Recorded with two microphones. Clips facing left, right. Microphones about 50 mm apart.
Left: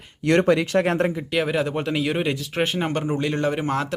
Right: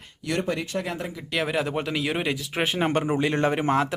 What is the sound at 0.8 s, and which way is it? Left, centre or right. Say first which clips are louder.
Speech: left 10 dB; left.